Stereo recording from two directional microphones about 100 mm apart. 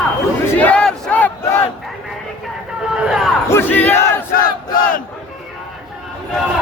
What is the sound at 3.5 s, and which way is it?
Battle cry, 20° left (ahead or behind).